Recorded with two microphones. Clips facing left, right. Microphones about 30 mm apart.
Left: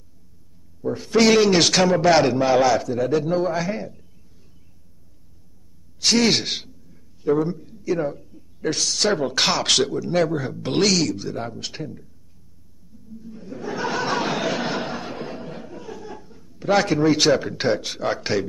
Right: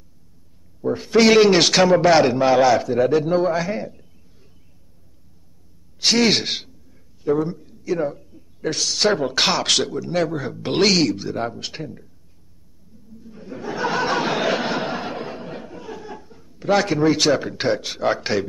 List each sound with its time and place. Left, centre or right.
0.8 s a man's voice: centre
5.9 s a man's voice: centre
10.6 s speech: centre
13.2 s a sound: centre